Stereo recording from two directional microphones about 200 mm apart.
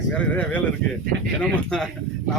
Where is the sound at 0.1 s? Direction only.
10° left (ahead or behind).